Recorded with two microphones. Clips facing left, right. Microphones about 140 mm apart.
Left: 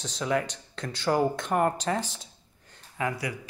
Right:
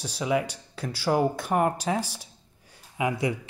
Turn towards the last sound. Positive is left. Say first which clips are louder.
# right 4 dB
turn(degrees=-25)  # may be behind; listen again after turning